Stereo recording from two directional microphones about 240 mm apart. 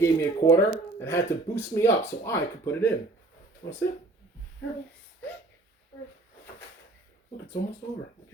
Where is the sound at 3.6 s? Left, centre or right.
Left.